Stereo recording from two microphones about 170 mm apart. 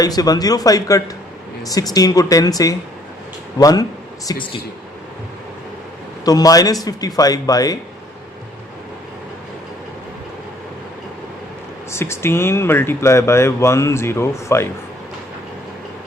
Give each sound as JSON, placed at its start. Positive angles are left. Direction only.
{"t": 0.0, "sound": "speech", "side_deg": 20}
{"t": 6.2, "sound": "speech", "side_deg": 20}
{"t": 11.9, "sound": "speech", "side_deg": 15}